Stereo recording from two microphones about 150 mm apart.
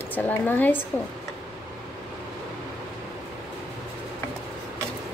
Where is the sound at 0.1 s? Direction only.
10° left (ahead or behind).